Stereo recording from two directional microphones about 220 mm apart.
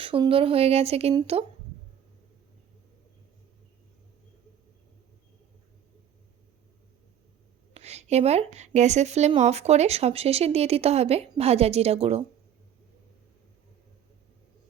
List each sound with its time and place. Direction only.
0.0 s a woman's voice: 25° right (ahead or behind)
7.7 s a woman's voice: 30° right (ahead or behind)